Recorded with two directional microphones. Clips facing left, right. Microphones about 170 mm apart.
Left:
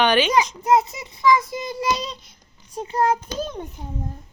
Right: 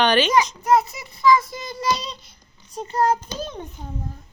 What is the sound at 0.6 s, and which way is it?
A woman's voice, 20° left (ahead or behind).